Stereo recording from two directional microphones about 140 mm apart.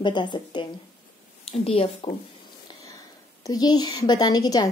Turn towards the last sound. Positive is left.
turn(degrees=30)  # may be behind; listen again after turning